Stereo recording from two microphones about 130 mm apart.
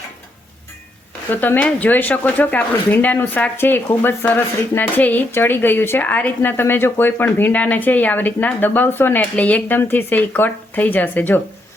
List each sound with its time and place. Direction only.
1.3 s speech: 15° left (ahead or behind)